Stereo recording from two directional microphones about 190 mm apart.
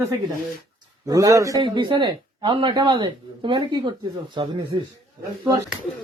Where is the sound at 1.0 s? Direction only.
20° right (ahead or behind).